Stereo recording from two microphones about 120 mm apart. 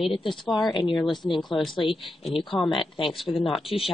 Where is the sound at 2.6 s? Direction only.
45° left (ahead or behind).